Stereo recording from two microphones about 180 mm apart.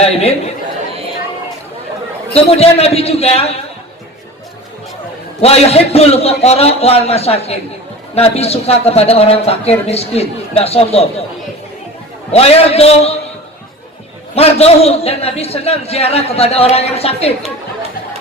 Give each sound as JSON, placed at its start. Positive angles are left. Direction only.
{"t": 0.0, "sound": "a man's voice", "side_deg": 35}
{"t": 2.3, "sound": "a man's voice", "side_deg": 35}
{"t": 5.4, "sound": "a man's voice", "side_deg": 35}
{"t": 12.3, "sound": "a man's voice", "side_deg": 35}
{"t": 14.3, "sound": "a man's voice", "side_deg": 35}